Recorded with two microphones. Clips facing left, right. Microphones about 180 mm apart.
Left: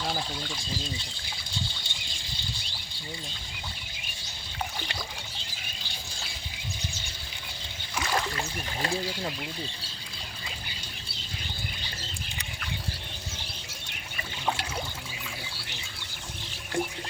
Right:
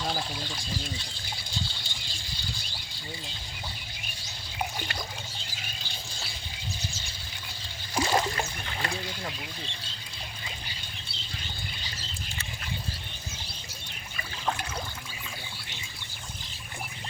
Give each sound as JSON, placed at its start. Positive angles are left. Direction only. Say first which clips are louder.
{"t": 0.0, "sound": "water", "louder": "even", "side_deg": 0}
{"t": 7.9, "sound": "splash", "louder": "right 4 dB", "side_deg": -25}